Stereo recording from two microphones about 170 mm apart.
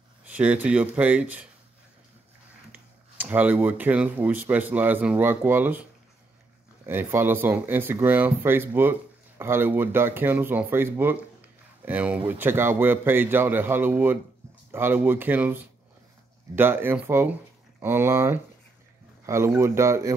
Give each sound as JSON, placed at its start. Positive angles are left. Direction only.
{"t": 0.2, "sound": "speech", "side_deg": -10}
{"t": 2.7, "sound": "speech", "side_deg": -10}
{"t": 6.9, "sound": "speech", "side_deg": -15}